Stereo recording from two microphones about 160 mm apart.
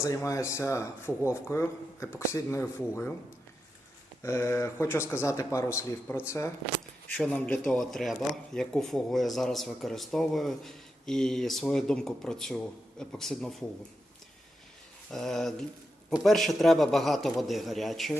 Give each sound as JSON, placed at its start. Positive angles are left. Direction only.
{"t": 0.0, "sound": "speech", "side_deg": 20}
{"t": 4.2, "sound": "speech", "side_deg": 15}
{"t": 7.2, "sound": "speech", "side_deg": 5}
{"t": 15.1, "sound": "speech", "side_deg": 0}